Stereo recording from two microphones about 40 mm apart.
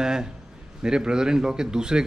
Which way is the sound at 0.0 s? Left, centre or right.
Centre.